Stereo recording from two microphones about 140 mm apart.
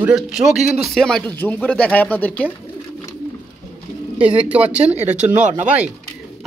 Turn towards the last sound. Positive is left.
turn(degrees=-55)  # may be behind; listen again after turning